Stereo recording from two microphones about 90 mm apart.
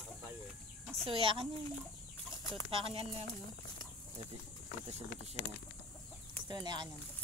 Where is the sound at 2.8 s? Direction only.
90° right.